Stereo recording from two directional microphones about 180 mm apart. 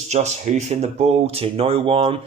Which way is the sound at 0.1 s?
40° right (ahead or behind).